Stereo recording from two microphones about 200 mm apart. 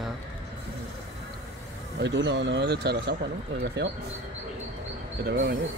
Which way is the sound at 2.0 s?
60° right (ahead or behind).